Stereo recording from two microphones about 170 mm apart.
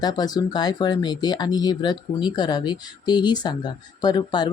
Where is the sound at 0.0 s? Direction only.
20° left (ahead or behind).